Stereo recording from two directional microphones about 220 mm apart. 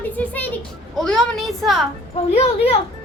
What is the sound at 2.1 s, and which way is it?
Speech, 25° left (ahead or behind).